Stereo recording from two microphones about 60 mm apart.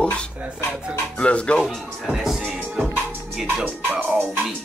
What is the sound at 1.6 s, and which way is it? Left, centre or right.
Speech, centre.